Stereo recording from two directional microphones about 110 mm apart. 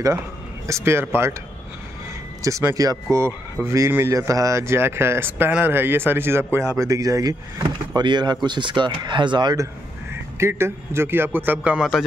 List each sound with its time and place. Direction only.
0.7 s speech: 25° right (ahead or behind)
2.7 s speech: 30° right (ahead or behind)
10.3 s a man's voice: 25° right (ahead or behind); by 12.0 s 5° right (ahead or behind)